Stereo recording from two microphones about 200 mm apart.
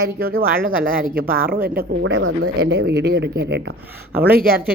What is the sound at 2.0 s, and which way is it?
Speech, 85° right.